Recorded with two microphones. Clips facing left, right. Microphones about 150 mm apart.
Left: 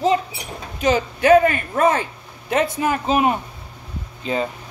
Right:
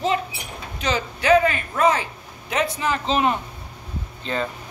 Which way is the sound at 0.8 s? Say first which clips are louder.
Left 4 dB; 45° left (ahead or behind).